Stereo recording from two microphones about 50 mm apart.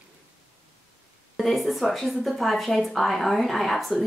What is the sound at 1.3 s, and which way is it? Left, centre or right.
Speech, centre.